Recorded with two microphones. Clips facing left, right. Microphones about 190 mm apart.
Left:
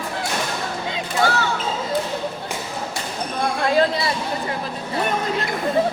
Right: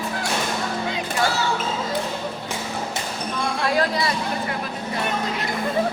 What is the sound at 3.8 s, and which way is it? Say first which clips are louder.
Chatter: left 4 dB; 25° left (ahead or behind).